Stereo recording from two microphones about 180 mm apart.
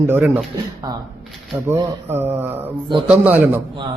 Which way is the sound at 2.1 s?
10° right (ahead or behind).